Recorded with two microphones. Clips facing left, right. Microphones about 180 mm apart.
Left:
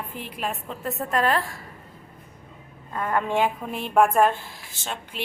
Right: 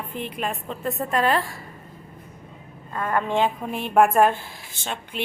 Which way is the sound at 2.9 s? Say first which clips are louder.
Right 1 dB; 10° left (ahead or behind).